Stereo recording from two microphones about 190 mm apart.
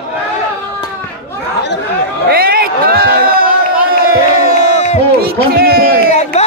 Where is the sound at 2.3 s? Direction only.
50° right (ahead or behind).